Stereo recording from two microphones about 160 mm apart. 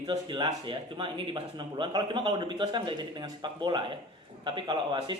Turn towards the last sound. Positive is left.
turn(degrees=-30)  # may be behind; listen again after turning